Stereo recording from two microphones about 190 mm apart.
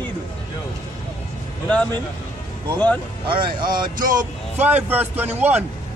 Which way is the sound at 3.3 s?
25° right (ahead or behind).